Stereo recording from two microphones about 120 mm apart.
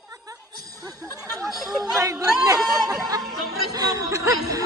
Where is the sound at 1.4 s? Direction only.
Centre (ahead or behind).